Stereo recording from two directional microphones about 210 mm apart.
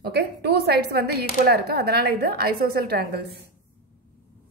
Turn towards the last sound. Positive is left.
turn(degrees=-50)  # may be behind; listen again after turning